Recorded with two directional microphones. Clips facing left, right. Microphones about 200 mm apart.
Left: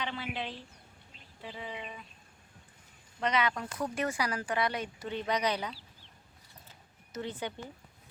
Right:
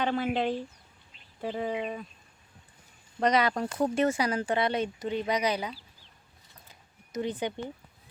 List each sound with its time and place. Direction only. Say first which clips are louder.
0.0 s speech: right 10 dB; 50° right (ahead or behind)
3.2 s speech: right 6 dB; 40° right (ahead or behind); by 5.7 s 10° right (ahead or behind)
6.7 s a sound: right 2 dB; 15° right (ahead or behind)